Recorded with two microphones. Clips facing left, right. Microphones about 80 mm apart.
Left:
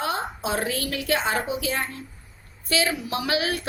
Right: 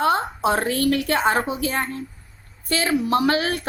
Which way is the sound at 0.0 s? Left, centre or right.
Right.